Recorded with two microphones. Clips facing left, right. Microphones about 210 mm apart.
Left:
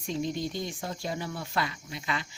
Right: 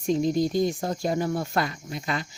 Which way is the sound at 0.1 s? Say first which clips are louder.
Right 9 dB; 40° right (ahead or behind).